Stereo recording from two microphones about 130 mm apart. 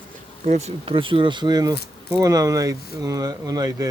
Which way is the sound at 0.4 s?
55° right (ahead or behind).